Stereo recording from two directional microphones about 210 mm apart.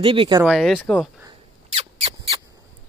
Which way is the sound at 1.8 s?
30° right (ahead or behind).